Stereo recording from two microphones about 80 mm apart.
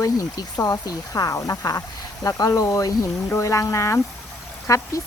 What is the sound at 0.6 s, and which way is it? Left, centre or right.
Speech, left.